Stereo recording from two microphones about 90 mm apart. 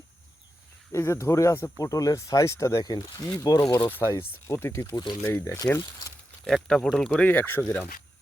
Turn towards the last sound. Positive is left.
turn(degrees=20)  # may be behind; listen again after turning